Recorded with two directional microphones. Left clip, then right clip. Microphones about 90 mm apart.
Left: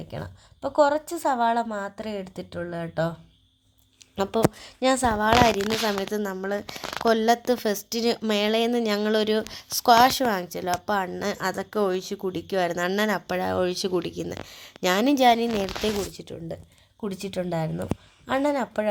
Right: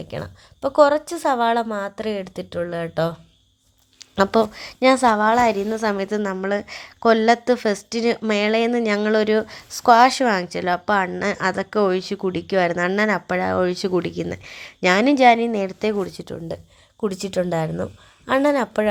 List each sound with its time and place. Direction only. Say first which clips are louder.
0.1 s a woman's voice: right 6 dB; 30° right (ahead or behind)
4.2 s a woman's voice: right 6 dB; 35° right (ahead or behind)
5.8 s a woman's voice: right 4 dB; 45° right (ahead or behind)
15.0 s a woman's voice: right 4 dB; 35° right (ahead or behind)